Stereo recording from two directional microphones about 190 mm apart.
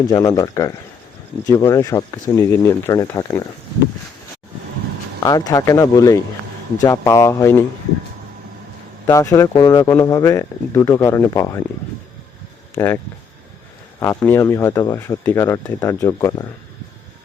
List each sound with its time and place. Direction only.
0.1 s speech: 20° left (ahead or behind)
5.2 s speech: 20° left (ahead or behind)
9.0 s speech: 15° left (ahead or behind)
12.7 s speech: 10° left (ahead or behind)
14.0 s speech: 15° left (ahead or behind)